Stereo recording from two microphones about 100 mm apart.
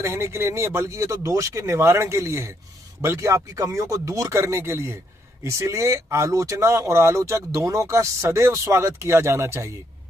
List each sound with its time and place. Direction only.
0.0 s speech: 30° right (ahead or behind)